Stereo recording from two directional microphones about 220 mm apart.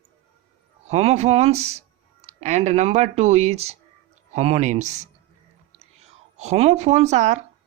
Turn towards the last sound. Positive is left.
turn(degrees=-30)  # may be behind; listen again after turning